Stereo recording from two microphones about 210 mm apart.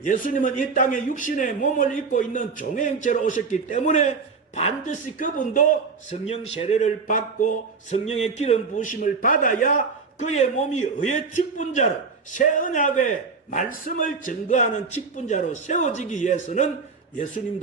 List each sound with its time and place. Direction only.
0.0 s a man's voice: 40° left (ahead or behind)